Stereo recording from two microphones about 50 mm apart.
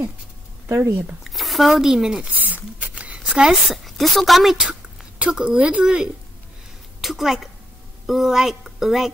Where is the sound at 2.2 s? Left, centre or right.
Right; by 3.5 s centre.